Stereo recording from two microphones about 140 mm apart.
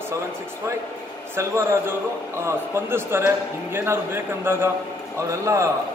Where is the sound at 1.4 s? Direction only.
20° right (ahead or behind).